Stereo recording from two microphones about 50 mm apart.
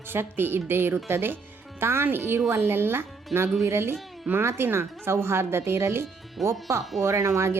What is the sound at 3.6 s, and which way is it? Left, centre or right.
A woman's voice, right.